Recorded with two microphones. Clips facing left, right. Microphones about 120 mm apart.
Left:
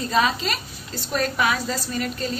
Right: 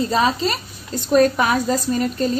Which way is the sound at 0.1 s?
35° right (ahead or behind).